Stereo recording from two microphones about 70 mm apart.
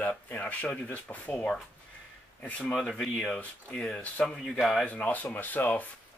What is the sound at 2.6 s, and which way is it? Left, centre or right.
Speech, centre.